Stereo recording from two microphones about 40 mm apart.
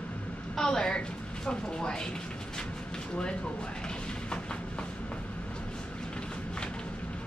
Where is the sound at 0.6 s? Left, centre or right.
Centre.